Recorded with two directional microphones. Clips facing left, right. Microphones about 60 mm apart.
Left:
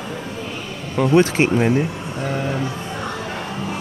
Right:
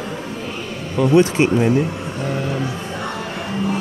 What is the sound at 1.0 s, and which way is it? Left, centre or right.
Speech, left.